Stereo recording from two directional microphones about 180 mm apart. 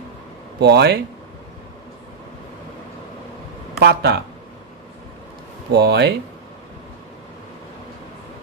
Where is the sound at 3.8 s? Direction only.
65° right (ahead or behind).